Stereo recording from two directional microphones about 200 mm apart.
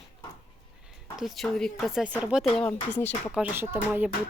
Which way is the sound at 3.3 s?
10° right (ahead or behind).